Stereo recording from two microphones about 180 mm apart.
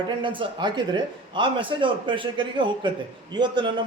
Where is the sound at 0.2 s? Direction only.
25° right (ahead or behind).